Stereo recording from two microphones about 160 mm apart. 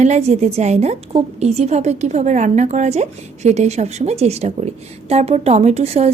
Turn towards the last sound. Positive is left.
turn(degrees=-40)  # may be behind; listen again after turning